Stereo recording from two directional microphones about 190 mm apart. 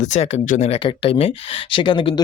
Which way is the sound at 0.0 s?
40° left (ahead or behind).